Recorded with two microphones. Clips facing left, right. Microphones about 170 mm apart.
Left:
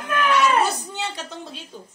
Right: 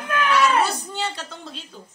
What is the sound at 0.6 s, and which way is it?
Speech, 15° left (ahead or behind).